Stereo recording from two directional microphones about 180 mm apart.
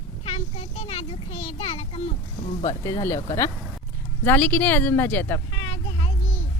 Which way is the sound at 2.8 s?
15° left (ahead or behind).